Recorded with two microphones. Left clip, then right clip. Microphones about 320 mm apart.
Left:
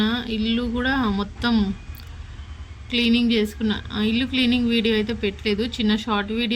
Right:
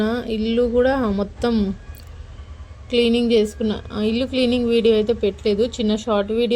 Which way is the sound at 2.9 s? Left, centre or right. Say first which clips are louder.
Right 4 dB; centre.